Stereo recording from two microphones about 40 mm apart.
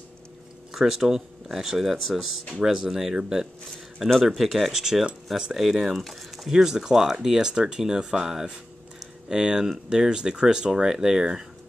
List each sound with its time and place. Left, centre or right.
0.7 s speech: centre
6.5 s speech: centre